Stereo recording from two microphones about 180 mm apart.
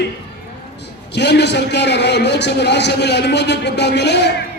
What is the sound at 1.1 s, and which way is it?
A man's voice, 70° left (ahead or behind).